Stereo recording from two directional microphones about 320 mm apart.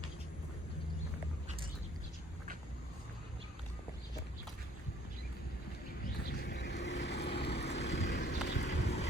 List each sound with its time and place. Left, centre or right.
6.4 s vehicle: left